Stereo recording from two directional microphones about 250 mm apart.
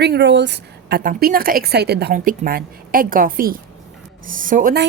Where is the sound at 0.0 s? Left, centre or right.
Right.